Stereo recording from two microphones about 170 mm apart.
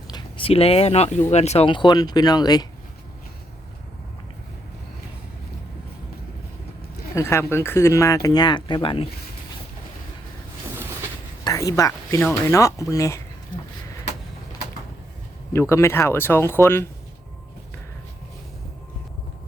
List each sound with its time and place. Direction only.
0.1 s speech: 30° left (ahead or behind)
7.2 s speech: 15° left (ahead or behind); by 9.0 s 30° left (ahead or behind)
11.4 s speech: 20° left (ahead or behind)
15.7 s speech: 15° left (ahead or behind)